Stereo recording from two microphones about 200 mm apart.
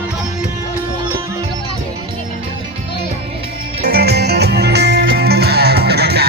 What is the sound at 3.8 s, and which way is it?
Music, 50° right (ahead or behind).